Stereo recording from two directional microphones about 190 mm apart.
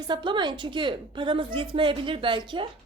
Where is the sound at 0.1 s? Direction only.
25° right (ahead or behind).